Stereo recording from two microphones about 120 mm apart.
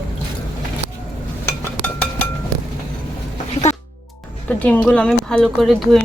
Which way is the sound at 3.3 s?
75° left (ahead or behind).